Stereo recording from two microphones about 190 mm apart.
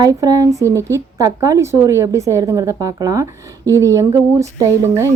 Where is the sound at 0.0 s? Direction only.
20° right (ahead or behind).